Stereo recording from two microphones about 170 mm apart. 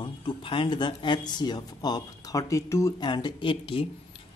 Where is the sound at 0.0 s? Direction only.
30° left (ahead or behind).